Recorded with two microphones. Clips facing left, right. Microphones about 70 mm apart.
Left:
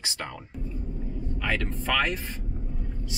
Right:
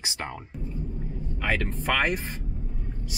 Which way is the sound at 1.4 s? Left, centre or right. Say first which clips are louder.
Right 2 dB; centre.